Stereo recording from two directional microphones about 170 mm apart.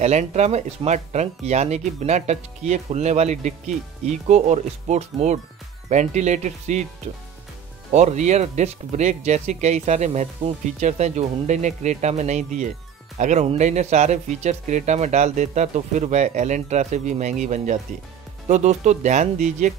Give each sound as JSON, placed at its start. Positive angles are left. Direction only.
{"t": 0.0, "sound": "speech", "side_deg": -45}
{"t": 7.9, "sound": "speech", "side_deg": -45}